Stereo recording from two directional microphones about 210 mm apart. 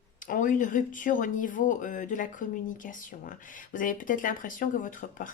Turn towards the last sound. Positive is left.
turn(degrees=40)  # may be behind; listen again after turning